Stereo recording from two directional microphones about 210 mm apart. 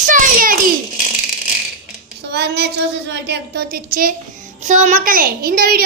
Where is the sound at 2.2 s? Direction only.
50° right (ahead or behind).